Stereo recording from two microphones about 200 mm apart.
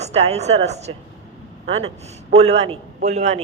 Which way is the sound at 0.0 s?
35° right (ahead or behind).